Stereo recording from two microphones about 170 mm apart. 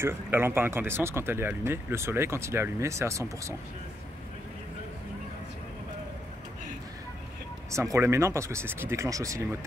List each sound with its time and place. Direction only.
0.0 s speech: 15° right (ahead or behind)
7.7 s speech: 15° right (ahead or behind)